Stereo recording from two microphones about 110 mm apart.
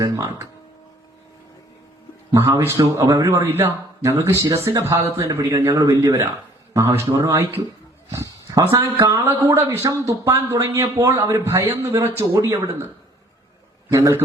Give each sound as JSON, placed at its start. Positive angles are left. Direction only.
{"t": 0.0, "sound": "speech", "side_deg": -30}
{"t": 2.3, "sound": "speech", "side_deg": -25}
{"t": 8.1, "sound": "dog", "side_deg": -25}
{"t": 8.7, "sound": "speech", "side_deg": -30}
{"t": 13.9, "sound": "speech", "side_deg": -25}